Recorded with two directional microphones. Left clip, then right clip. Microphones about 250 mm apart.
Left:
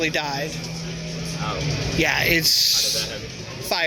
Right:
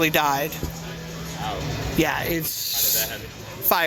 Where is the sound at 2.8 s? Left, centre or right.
Right.